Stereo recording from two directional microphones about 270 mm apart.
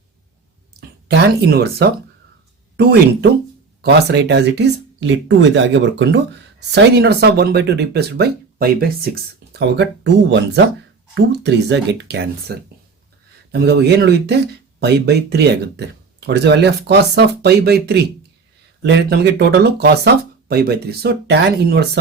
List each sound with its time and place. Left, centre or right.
0.8 s speech: right